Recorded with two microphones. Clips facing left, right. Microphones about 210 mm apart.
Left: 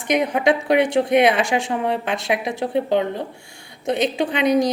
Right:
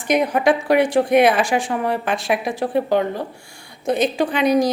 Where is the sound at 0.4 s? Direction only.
20° left (ahead or behind).